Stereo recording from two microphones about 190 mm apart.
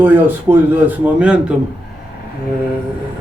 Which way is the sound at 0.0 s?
10° right (ahead or behind).